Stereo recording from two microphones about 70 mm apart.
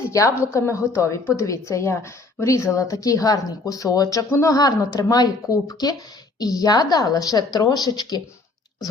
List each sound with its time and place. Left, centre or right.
0.1 s a woman's voice: left
4.3 s a woman's voice: left
4.5 s a woman's voice: left